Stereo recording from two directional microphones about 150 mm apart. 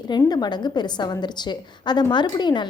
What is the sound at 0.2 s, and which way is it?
A woman's voice, 25° left (ahead or behind).